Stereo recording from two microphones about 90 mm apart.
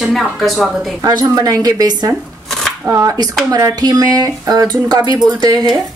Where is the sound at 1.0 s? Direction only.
50° right (ahead or behind).